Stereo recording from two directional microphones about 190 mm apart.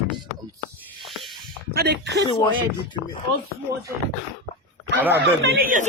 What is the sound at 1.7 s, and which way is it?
Speech, 60° right (ahead or behind).